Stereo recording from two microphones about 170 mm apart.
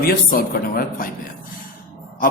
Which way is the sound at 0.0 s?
60° left (ahead or behind).